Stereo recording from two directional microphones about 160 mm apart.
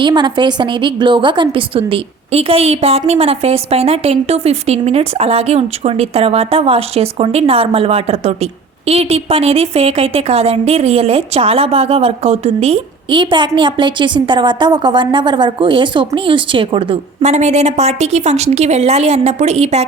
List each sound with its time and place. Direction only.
0.0 s a woman's voice: 30° right (ahead or behind)
17.2 s a woman's voice: 45° right (ahead or behind)